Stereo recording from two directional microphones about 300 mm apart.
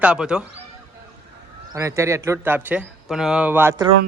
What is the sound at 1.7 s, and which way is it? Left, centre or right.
Speech, centre.